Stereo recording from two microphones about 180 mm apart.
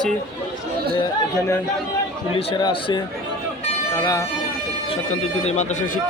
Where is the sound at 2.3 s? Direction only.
30° left (ahead or behind).